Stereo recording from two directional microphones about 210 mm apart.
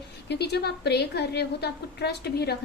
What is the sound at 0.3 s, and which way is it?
A woman's voice, 50° left (ahead or behind).